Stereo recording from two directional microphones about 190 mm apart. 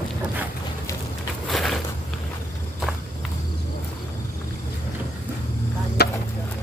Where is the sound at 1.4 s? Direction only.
Centre (ahead or behind).